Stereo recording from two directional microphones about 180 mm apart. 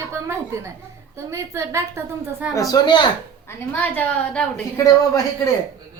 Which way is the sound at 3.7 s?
10° left (ahead or behind).